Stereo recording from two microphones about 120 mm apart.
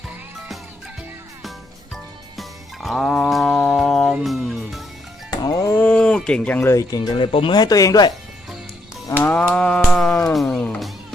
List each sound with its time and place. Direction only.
2.3 s music: centre (ahead or behind)
5.3 s music: 30° left (ahead or behind)
5.7 s a sound: 15° left (ahead or behind)
6.9 s speech: 35° left (ahead or behind)
7.6 s speech: 30° left (ahead or behind)
9.1 s livestock: 15° left (ahead or behind)
9.8 s music: 5° left (ahead or behind)